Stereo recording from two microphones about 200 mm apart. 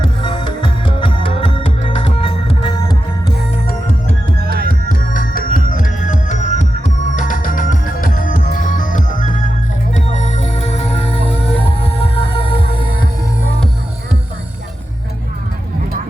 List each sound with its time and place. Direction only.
0.2 s music: 20° left (ahead or behind)
4.4 s music: 55° right (ahead or behind)
4.7 s music: 45° left (ahead or behind); by 13.1 s 25° left (ahead or behind)